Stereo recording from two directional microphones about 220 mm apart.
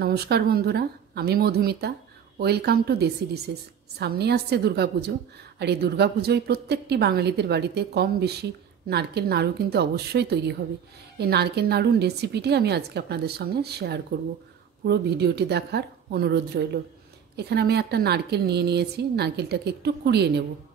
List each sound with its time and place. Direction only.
0.0 s a woman's voice: 45° right (ahead or behind)